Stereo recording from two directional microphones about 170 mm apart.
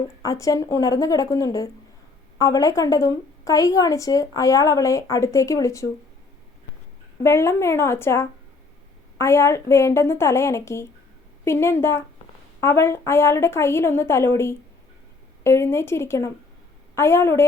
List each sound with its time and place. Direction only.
0.2 s a woman's voice: 20° left (ahead or behind)
7.2 s a woman's voice: 15° left (ahead or behind)